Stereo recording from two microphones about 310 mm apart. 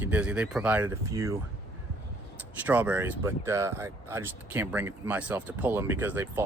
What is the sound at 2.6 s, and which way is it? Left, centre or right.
Speech, centre.